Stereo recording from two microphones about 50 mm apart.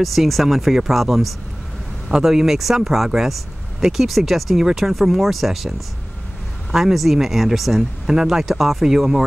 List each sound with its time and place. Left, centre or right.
0.0 s speech: centre